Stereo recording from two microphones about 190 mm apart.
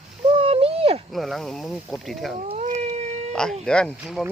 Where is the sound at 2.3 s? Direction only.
35° right (ahead or behind).